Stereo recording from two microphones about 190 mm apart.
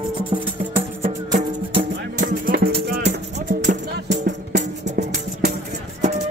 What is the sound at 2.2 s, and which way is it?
Music, 50° right (ahead or behind).